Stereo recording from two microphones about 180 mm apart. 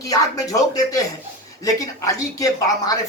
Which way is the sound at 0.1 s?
20° left (ahead or behind).